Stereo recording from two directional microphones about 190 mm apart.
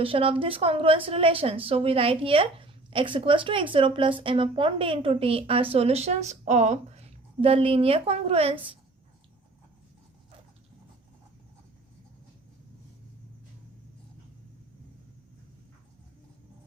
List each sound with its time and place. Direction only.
0.0 s a woman's voice: 30° right (ahead or behind)